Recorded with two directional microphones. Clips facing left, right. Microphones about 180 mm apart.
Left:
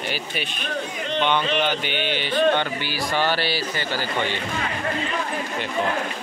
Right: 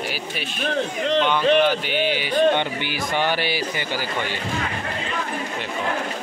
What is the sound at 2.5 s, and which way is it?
A man's voice, 20° right (ahead or behind).